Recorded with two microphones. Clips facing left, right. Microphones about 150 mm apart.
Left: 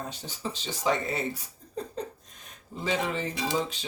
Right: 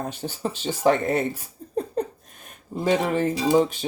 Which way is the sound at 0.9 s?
55° right (ahead or behind).